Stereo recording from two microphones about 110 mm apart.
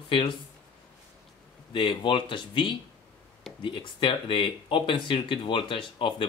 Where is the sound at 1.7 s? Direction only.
50° left (ahead or behind).